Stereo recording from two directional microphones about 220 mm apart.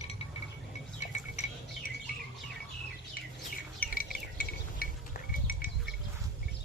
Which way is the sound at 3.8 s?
40° left (ahead or behind).